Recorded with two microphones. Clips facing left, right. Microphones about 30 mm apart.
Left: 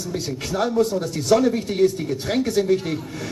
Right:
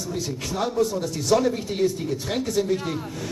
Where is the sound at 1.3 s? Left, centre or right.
Centre.